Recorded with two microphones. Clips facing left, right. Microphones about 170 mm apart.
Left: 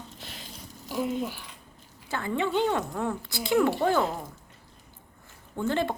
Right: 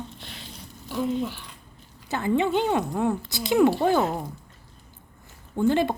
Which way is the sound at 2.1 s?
20° right (ahead or behind).